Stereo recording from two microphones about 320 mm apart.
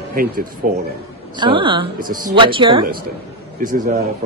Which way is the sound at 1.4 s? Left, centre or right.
Centre.